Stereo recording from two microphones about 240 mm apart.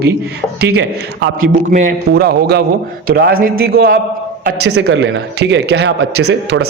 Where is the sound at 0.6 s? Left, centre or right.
Right.